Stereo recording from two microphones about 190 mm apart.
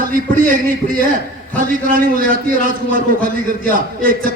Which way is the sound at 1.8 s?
45° right (ahead or behind).